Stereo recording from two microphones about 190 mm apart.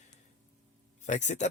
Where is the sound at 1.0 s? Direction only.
40° left (ahead or behind).